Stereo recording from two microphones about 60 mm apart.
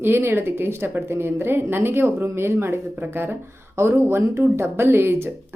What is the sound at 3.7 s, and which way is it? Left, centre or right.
A woman's voice, right.